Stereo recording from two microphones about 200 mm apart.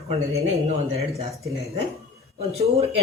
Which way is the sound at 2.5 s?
30° right (ahead or behind).